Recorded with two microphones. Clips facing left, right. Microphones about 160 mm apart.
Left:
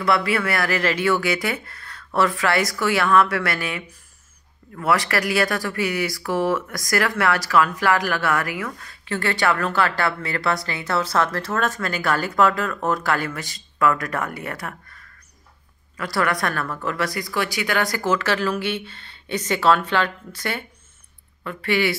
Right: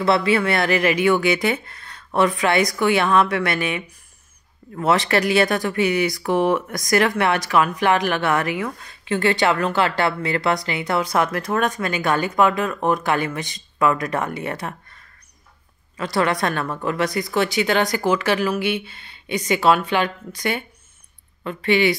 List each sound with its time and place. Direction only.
0.0 s speech: 25° right (ahead or behind)
16.0 s speech: 20° right (ahead or behind)